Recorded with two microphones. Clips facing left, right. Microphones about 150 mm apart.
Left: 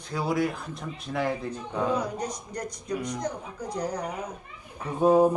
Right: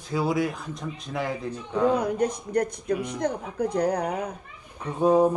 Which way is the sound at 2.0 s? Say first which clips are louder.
Right 6 dB; 55° right (ahead or behind).